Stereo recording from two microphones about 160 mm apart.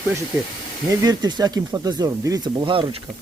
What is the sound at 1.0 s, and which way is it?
Speech, 25° right (ahead or behind).